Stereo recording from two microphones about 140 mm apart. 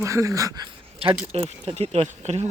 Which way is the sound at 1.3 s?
45° right (ahead or behind).